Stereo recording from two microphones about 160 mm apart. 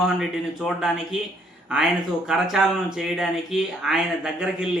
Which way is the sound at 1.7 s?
5° right (ahead or behind).